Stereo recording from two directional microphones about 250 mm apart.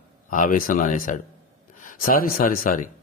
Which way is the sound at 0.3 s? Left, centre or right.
Left.